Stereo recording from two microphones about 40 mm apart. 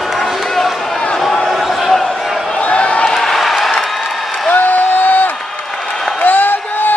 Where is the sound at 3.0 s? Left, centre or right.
Centre.